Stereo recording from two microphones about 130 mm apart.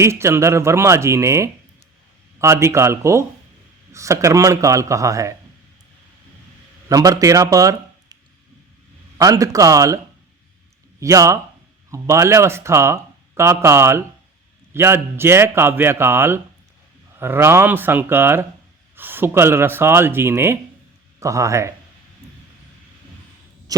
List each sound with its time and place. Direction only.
0.0 s speech: 20° right (ahead or behind)
6.8 s a man's voice: 25° right (ahead or behind)
11.0 s a man's voice: 25° right (ahead or behind)